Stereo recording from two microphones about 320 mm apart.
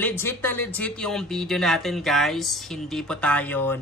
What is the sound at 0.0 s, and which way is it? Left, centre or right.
Speech, centre.